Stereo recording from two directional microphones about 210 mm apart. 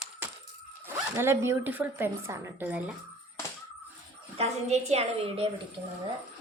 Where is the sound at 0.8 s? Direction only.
10° right (ahead or behind).